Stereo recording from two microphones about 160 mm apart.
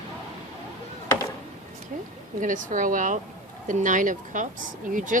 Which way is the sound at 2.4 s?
55° right (ahead or behind).